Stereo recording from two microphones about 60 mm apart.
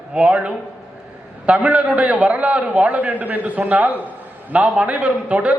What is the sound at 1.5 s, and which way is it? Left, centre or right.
A man's voice, right.